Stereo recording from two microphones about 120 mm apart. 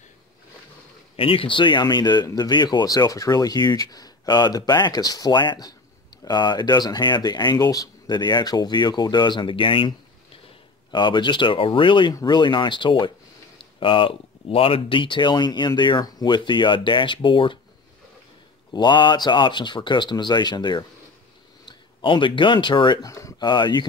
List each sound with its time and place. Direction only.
1.1 s speech: 50° left (ahead or behind)
12.1 s speech: 35° left (ahead or behind)
18.7 s speech: 40° left (ahead or behind)
23.0 s speech: 25° left (ahead or behind)
23.5 s speech: 40° left (ahead or behind)